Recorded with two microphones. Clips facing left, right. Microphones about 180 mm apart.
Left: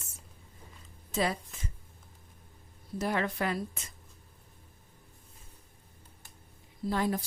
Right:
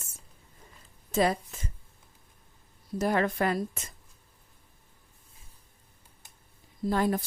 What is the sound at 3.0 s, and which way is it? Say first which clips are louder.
Speech: right 5 dB; 45° right (ahead or behind).